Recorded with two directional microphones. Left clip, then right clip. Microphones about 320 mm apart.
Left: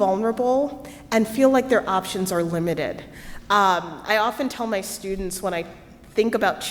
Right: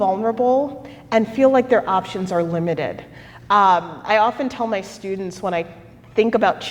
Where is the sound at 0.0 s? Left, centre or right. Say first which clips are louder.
Right 3 dB; left.